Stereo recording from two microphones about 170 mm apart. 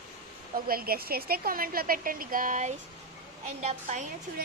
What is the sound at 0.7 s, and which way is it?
A woman's voice, 60° right (ahead or behind).